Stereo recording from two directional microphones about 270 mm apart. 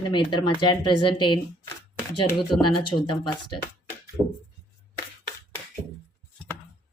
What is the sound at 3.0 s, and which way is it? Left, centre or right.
Speech, left.